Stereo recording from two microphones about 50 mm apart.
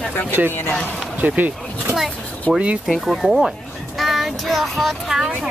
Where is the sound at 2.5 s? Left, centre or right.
Centre.